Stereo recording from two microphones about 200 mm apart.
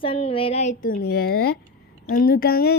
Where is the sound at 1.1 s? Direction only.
50° left (ahead or behind).